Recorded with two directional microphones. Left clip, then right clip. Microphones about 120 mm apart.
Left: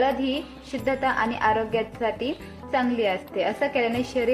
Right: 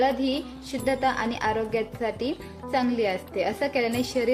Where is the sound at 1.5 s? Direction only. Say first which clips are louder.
Left 2 dB; 15° right (ahead or behind).